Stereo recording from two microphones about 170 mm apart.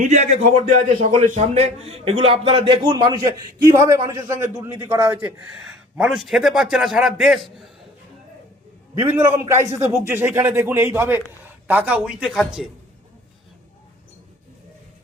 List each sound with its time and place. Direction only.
0.0 s a man's voice: 45° right (ahead or behind); by 7.7 s centre (ahead or behind)
9.0 s a man's voice: 15° right (ahead or behind)